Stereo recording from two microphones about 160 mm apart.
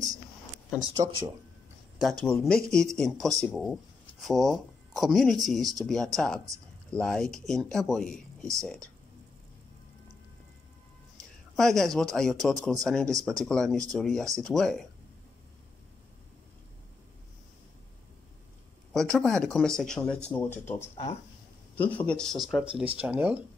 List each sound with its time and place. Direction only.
0.7 s speech: 25° right (ahead or behind)
2.0 s speech: centre (ahead or behind)
11.5 s speech: 5° left (ahead or behind)
18.9 s speech: 5° left (ahead or behind)
20.9 s speech: 40° left (ahead or behind)
21.9 s speech: 5° left (ahead or behind); by 23.4 s 10° right (ahead or behind)